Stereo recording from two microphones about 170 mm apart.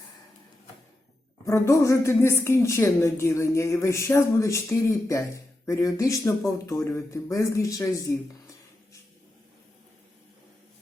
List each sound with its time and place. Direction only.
1.5 s speech: 15° left (ahead or behind)